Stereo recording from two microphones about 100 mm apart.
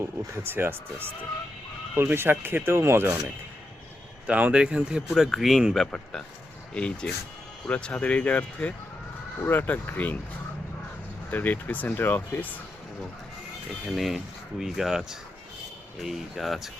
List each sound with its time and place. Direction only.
0.0 s speech: 25° right (ahead or behind); by 10.2 s 20° left (ahead or behind)
11.3 s speech: 20° left (ahead or behind)
13.9 s speech: centre (ahead or behind)